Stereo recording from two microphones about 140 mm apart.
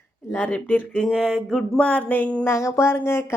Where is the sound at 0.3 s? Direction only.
10° left (ahead or behind).